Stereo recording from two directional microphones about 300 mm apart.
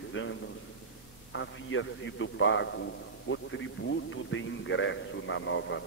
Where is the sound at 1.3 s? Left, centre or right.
Left.